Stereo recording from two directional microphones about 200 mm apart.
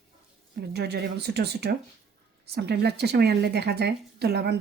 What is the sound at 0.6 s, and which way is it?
Speech, 55° right (ahead or behind).